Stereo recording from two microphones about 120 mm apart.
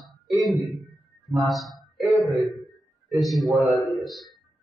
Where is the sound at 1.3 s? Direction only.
Centre (ahead or behind).